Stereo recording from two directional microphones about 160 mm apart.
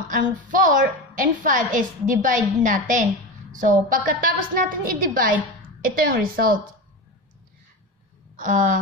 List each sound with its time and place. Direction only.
0.1 s a woman's voice: 55° right (ahead or behind)
8.4 s speech: 50° right (ahead or behind)